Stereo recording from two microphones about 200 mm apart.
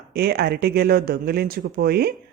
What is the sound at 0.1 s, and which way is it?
A man's voice, 50° right (ahead or behind).